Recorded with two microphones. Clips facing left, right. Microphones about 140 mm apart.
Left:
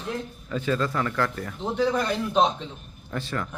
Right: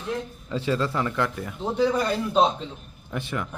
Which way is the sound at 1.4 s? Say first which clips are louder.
Right 4 dB; 5° right (ahead or behind).